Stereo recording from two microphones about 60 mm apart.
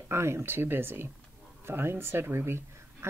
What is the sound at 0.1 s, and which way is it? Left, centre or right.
Speech, right.